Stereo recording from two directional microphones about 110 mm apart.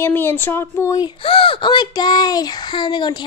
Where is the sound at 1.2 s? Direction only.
55° left (ahead or behind).